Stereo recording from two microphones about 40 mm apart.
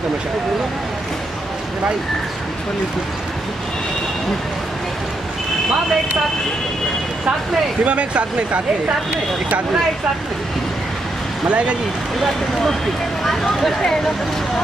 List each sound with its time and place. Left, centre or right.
7.8 s speech: right
11.4 s speech: right
13.2 s speech: centre